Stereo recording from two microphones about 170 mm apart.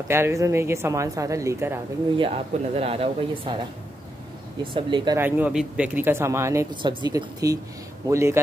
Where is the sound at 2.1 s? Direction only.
35° right (ahead or behind).